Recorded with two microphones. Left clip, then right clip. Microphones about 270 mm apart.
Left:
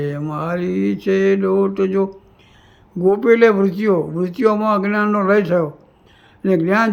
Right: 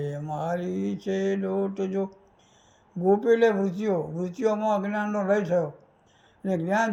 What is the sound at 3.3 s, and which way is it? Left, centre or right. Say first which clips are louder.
Mantra: left 10 dB; centre.